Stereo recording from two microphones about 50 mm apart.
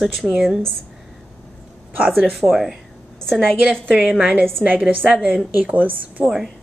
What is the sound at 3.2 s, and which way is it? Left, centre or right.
Speech, centre.